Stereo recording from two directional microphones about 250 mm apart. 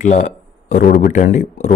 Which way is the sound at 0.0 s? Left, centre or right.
Left.